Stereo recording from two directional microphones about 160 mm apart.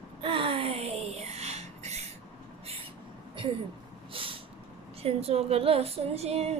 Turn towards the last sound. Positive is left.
turn(degrees=-40)  # may be behind; listen again after turning